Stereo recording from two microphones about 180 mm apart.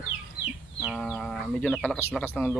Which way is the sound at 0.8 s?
5° right (ahead or behind).